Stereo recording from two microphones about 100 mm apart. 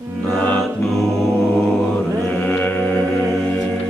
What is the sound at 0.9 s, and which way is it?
Mantra, 5° left (ahead or behind).